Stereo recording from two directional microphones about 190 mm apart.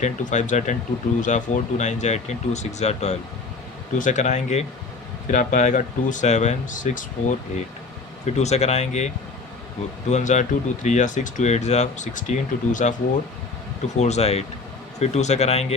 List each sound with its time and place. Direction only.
0.0 s speech: 40° left (ahead or behind)
10.1 s speech: 40° left (ahead or behind)